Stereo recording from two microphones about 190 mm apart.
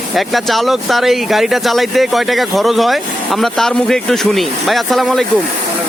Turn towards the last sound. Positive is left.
turn(degrees=0)  # may be behind; listen again after turning